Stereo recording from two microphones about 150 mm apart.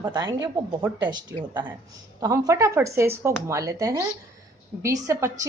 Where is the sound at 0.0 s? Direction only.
25° right (ahead or behind).